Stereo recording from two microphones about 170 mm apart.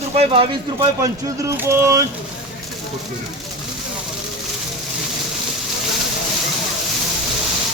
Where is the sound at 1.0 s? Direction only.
15° right (ahead or behind).